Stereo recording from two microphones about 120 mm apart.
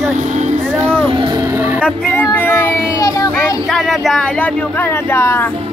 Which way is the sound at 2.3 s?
15° left (ahead or behind).